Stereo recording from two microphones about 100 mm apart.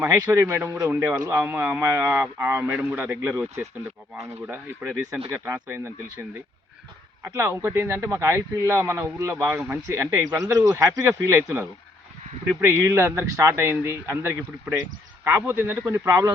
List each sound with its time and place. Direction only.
0.1 s speech: 30° right (ahead or behind)
3.2 s speech: 30° right (ahead or behind)
4.4 s speech: 20° right (ahead or behind)